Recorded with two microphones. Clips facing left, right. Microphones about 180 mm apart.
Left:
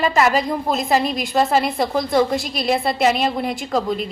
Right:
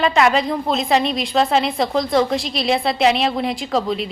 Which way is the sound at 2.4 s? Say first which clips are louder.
Right 2 dB; 50° left (ahead or behind).